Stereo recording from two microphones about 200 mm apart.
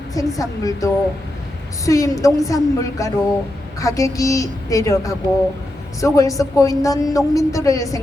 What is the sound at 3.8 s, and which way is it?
A woman's voice, 15° left (ahead or behind).